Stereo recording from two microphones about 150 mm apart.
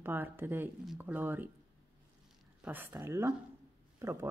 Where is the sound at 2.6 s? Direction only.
10° right (ahead or behind).